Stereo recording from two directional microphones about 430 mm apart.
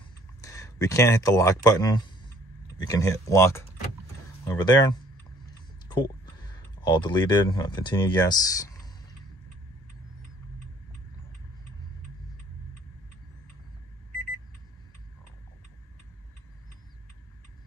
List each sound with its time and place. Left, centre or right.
0.4 s speech: centre